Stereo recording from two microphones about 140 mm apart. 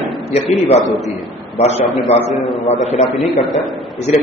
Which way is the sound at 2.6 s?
50° left (ahead or behind).